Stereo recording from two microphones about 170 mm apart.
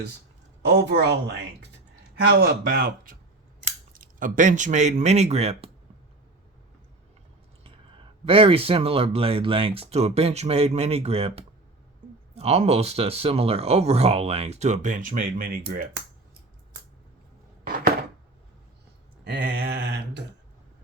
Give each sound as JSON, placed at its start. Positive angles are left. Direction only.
{"t": 0.6, "sound": "a woman's voice", "side_deg": -90}
{"t": 2.4, "sound": "speech", "side_deg": -60}
{"t": 8.2, "sound": "speech", "side_deg": -35}
{"t": 17.6, "sound": "chopping", "side_deg": -55}
{"t": 19.2, "sound": "a sound", "side_deg": -65}